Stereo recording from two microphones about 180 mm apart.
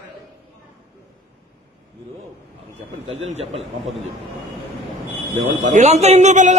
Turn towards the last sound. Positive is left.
turn(degrees=-40)  # may be behind; listen again after turning